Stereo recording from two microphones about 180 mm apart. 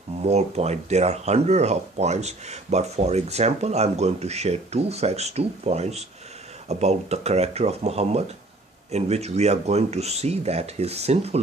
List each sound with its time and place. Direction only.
0.2 s speech: 35° right (ahead or behind)